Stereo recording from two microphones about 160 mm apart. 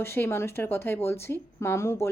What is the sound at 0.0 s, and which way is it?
Speech, 15° left (ahead or behind).